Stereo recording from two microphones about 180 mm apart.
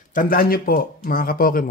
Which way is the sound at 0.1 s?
50° left (ahead or behind).